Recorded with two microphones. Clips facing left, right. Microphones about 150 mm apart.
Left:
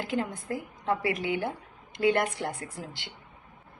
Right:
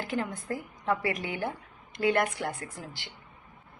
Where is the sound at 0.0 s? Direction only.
20° left (ahead or behind).